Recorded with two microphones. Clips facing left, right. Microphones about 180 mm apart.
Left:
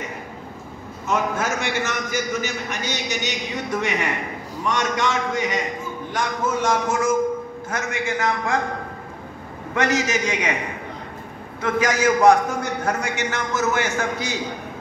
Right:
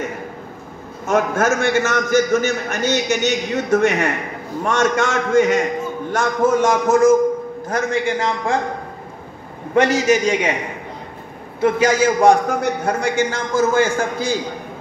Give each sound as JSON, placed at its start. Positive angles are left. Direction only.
{"t": 1.0, "sound": "a man's voice", "side_deg": -50}
{"t": 9.8, "sound": "a man's voice", "side_deg": -30}
{"t": 11.6, "sound": "a man's voice", "side_deg": -25}